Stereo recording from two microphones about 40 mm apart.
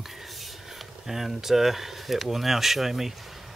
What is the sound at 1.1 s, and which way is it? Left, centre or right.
Speech, centre.